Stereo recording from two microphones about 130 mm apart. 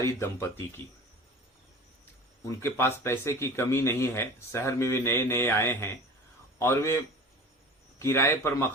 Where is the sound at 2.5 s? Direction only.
20° left (ahead or behind).